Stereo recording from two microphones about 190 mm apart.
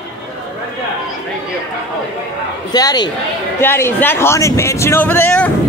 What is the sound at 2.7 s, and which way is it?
Speech, 20° left (ahead or behind).